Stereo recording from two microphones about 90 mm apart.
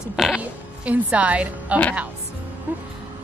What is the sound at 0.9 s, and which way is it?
Speech, 15° right (ahead or behind).